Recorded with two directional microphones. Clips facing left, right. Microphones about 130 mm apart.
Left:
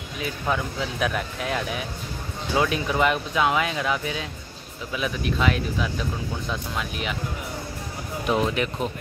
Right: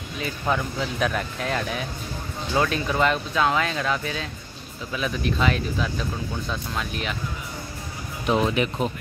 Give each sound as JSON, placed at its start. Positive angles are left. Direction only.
{"t": 0.2, "sound": "speech", "side_deg": 5}
{"t": 8.3, "sound": "speech", "side_deg": -5}